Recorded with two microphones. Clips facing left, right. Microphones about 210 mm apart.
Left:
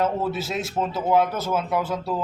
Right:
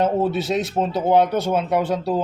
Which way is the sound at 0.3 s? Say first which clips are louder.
Right 5 dB; centre (ahead or behind).